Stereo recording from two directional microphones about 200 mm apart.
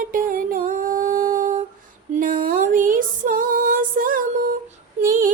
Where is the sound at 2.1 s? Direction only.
40° right (ahead or behind).